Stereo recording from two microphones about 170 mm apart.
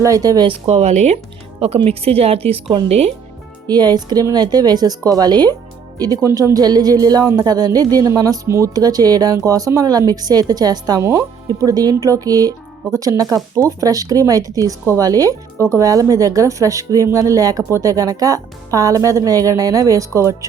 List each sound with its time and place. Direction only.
0.0 s speech: 20° right (ahead or behind)